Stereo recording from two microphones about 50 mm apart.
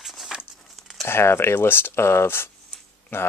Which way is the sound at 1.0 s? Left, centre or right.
Left.